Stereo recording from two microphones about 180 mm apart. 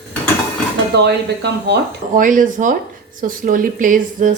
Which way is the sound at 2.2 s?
45° right (ahead or behind).